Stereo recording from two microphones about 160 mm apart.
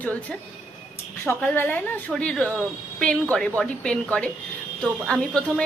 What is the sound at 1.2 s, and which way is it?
A woman's voice, 10° left (ahead or behind).